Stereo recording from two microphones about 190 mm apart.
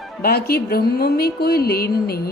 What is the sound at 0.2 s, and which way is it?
A woman's voice, 55° left (ahead or behind).